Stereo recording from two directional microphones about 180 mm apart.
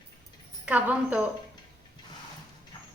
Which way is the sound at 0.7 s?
10° right (ahead or behind).